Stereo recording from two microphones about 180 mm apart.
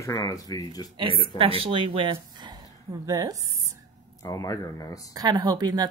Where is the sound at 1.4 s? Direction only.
30° right (ahead or behind).